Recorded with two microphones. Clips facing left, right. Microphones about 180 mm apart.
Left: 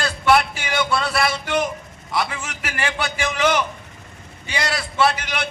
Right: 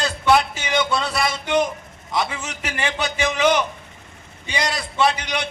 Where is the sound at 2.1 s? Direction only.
25° right (ahead or behind).